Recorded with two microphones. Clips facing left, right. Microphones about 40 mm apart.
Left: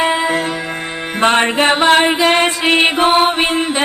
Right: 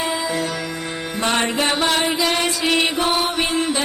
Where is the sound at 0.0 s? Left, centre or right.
Left.